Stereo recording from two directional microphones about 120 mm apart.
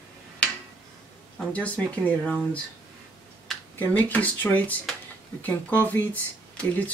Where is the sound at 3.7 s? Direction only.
15° left (ahead or behind).